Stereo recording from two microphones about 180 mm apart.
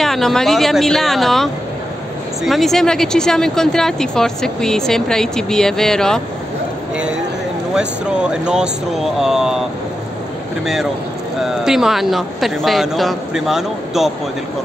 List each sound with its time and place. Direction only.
0.0 s speech: centre (ahead or behind)
7.7 s speech: 5° right (ahead or behind)